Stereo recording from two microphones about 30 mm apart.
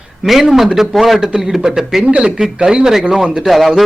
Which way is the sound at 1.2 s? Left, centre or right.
Centre.